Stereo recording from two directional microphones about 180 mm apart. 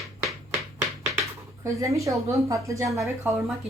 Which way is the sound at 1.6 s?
15° right (ahead or behind).